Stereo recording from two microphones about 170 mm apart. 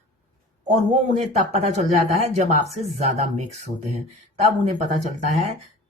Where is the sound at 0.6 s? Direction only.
45° right (ahead or behind).